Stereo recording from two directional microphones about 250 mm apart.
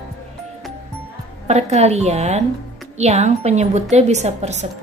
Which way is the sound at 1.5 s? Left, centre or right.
Right.